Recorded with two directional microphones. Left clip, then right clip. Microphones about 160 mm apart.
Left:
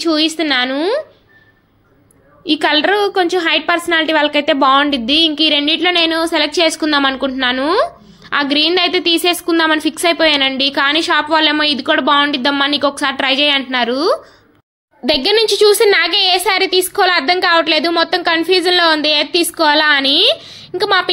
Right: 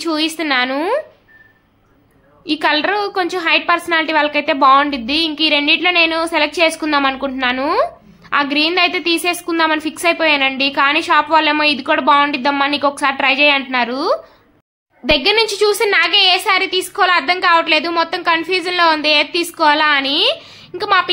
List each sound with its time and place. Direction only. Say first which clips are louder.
0.0 s a woman's voice: left 4 dB; 10° left (ahead or behind)
2.4 s a woman's voice: left 2 dB; 20° left (ahead or behind)